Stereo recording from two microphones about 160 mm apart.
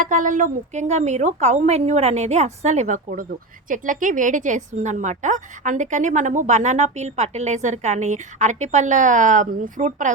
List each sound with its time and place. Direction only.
0.0 s a woman's voice: 55° right (ahead or behind)